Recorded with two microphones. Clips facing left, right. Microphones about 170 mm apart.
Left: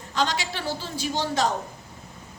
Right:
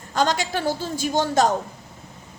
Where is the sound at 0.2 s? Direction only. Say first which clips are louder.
Right 5 dB; 45° right (ahead or behind).